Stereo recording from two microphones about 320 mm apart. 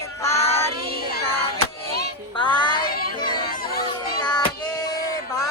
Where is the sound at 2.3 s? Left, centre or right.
Centre.